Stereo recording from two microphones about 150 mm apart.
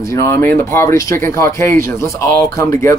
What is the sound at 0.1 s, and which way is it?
Speech, 15° left (ahead or behind).